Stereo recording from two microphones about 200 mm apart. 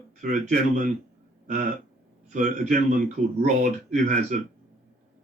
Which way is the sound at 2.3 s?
40° right (ahead or behind).